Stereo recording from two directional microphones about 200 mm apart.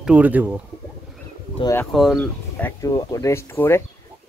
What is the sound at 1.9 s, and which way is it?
Speech, centre (ahead or behind).